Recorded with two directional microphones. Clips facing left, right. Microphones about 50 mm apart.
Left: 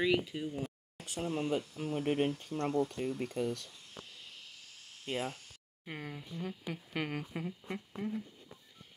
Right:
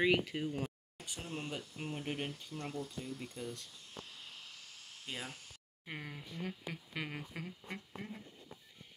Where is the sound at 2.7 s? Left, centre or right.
Left.